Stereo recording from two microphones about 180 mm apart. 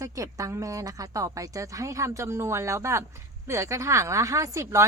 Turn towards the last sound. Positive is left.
turn(degrees=-15)  # may be behind; listen again after turning